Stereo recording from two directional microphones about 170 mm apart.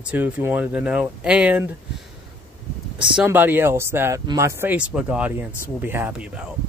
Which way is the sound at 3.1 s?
10° right (ahead or behind).